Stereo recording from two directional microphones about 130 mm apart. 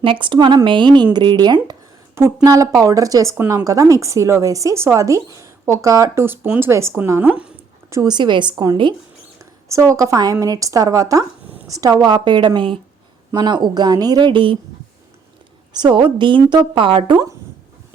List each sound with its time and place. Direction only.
0.0 s a woman's voice: 40° right (ahead or behind)
2.1 s speech: 20° right (ahead or behind)
7.9 s a woman's voice: 25° right (ahead or behind)
8.1 s a woman's voice: 35° right (ahead or behind)
15.7 s a woman's voice: 35° right (ahead or behind)